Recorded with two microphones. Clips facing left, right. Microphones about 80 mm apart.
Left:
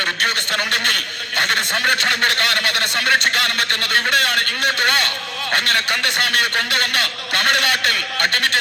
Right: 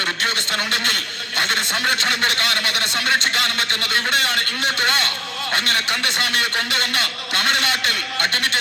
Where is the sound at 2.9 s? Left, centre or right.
Right.